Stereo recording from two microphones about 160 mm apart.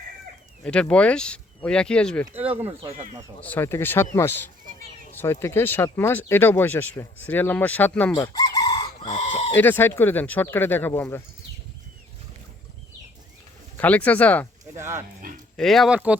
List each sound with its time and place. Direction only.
0.6 s speech: 5° left (ahead or behind)
3.4 s speech: 10° left (ahead or behind)
8.1 s chicken: 25° left (ahead or behind)
9.0 s chicken: 45° left (ahead or behind)
9.6 s speech: 15° left (ahead or behind)
13.7 s speech: 10° left (ahead or behind)
14.6 s a sound: 15° right (ahead or behind)
15.5 s speech: centre (ahead or behind)